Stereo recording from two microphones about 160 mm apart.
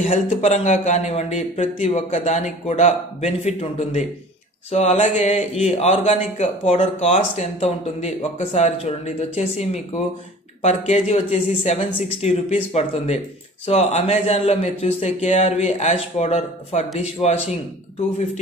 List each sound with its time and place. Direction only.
0.0 s a man's voice: 40° left (ahead or behind)